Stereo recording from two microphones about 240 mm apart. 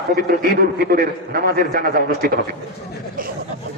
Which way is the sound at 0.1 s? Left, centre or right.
Right.